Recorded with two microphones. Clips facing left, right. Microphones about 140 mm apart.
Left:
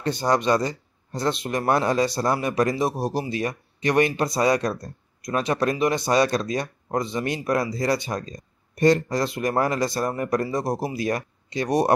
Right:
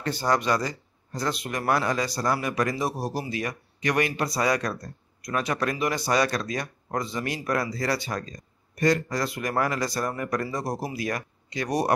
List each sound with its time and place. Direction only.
0.0 s speech: 20° left (ahead or behind)